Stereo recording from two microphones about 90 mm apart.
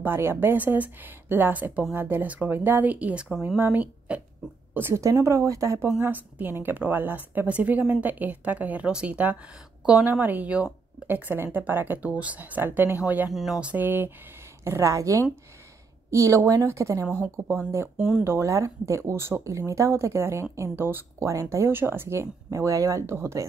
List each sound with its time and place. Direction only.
0.0 s a woman's voice: 25° right (ahead or behind)
5.9 s a woman's voice: 20° right (ahead or behind)
13.3 s speech: centre (ahead or behind)
13.6 s a woman's voice: 15° right (ahead or behind)
17.9 s a woman's voice: 5° right (ahead or behind)
18.2 s speech: 30° right (ahead or behind)